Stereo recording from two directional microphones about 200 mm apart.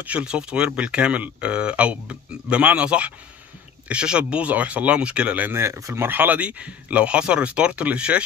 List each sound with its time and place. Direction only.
0.0 s speech: 5° right (ahead or behind)